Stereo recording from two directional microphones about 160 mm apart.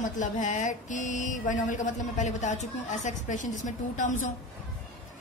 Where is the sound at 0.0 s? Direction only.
50° left (ahead or behind).